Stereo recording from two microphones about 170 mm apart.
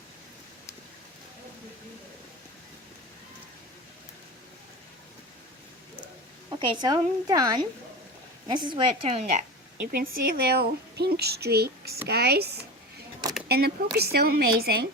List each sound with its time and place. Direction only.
6.6 s a woman's voice: 25° right (ahead or behind)
9.8 s a woman's voice: 60° right (ahead or behind)